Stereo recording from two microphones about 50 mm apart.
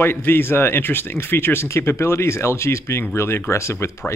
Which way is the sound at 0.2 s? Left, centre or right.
Left.